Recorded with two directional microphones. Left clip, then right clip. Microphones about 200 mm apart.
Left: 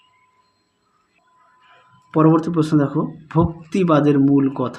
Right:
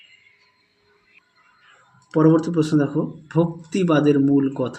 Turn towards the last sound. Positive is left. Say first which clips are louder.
# left 2 dB
turn(degrees=15)  # may be behind; listen again after turning